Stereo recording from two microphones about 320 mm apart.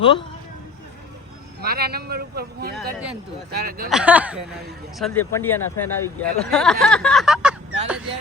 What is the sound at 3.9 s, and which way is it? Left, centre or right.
Speech, centre.